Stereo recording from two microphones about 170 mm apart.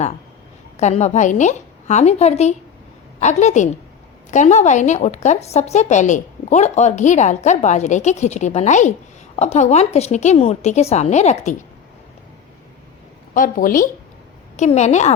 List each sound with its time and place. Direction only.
0.8 s a woman's voice: 40° left (ahead or behind)
13.3 s a woman's voice: 55° left (ahead or behind)
14.5 s a woman's voice: 45° left (ahead or behind)